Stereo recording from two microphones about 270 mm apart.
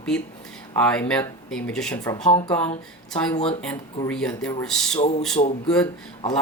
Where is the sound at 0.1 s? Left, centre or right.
Centre.